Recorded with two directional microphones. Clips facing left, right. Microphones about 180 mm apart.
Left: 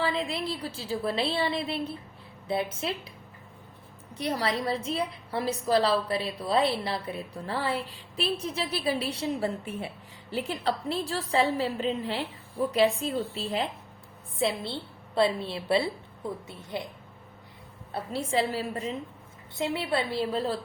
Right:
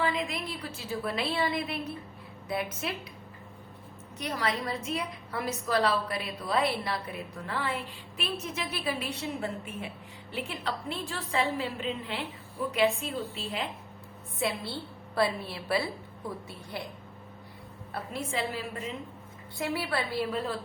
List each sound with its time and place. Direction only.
0.0 s a woman's voice: 30° left (ahead or behind)
4.2 s a woman's voice: 30° left (ahead or behind)
14.3 s a woman's voice: 25° left (ahead or behind)
17.9 s a woman's voice: 35° left (ahead or behind)
19.5 s a woman's voice: 25° left (ahead or behind)